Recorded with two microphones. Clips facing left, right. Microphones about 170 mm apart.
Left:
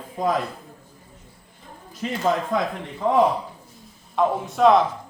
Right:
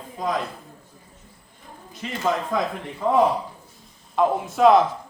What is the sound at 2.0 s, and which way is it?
Speech, 40° left (ahead or behind).